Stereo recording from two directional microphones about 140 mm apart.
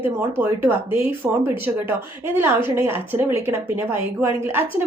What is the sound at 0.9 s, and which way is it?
Speech, 40° left (ahead or behind).